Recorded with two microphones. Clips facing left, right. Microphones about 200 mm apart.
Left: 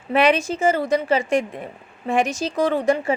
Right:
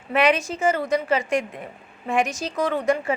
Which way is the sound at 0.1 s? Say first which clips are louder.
Left 2 dB; 30° left (ahead or behind).